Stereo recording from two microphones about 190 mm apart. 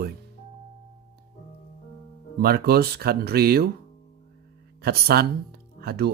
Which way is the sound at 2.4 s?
55° right (ahead or behind).